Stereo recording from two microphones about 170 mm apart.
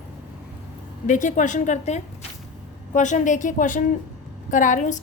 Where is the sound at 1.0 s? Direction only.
50° left (ahead or behind).